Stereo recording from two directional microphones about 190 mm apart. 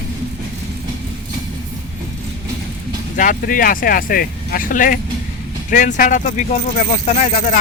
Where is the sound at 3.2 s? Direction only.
45° left (ahead or behind).